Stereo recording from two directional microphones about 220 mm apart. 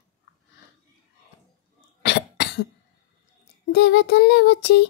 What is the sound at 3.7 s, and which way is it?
Child singing, 50° left (ahead or behind).